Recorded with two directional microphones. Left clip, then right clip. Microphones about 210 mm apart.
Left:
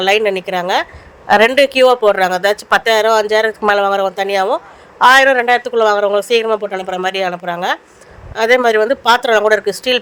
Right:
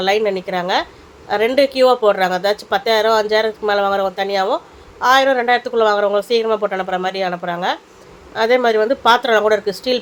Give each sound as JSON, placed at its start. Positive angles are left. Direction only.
{"t": 0.0, "sound": "speech", "side_deg": 35}